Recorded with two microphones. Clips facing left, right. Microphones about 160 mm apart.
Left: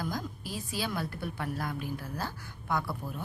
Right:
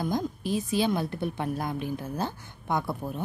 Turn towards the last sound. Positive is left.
turn(degrees=-20)  # may be behind; listen again after turning